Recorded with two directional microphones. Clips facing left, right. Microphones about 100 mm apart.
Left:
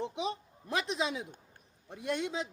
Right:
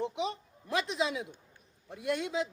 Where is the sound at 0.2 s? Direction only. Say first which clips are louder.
Right 1 dB; 25° left (ahead or behind).